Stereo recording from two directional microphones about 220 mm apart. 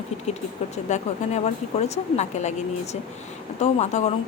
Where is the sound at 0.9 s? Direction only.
30° left (ahead or behind).